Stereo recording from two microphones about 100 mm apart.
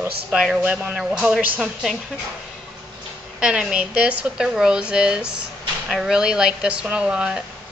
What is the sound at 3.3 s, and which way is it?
Speech, 10° right (ahead or behind).